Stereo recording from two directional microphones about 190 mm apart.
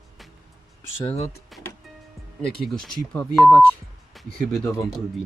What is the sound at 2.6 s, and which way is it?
Speech, 5° left (ahead or behind).